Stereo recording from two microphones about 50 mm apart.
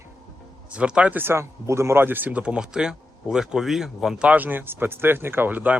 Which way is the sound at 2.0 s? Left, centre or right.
Right.